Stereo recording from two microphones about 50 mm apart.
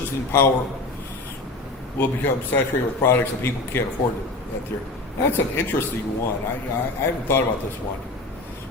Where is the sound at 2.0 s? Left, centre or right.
Left.